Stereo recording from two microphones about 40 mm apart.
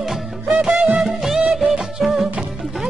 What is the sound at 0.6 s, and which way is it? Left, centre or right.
Music, centre.